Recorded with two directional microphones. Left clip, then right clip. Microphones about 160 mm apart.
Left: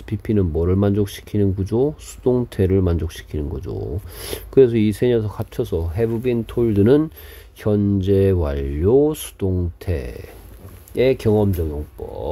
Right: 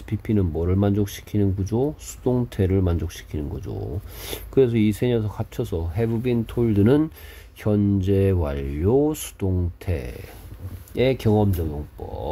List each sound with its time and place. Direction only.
0.1 s speech: 30° left (ahead or behind)
10.9 s speech: 40° left (ahead or behind)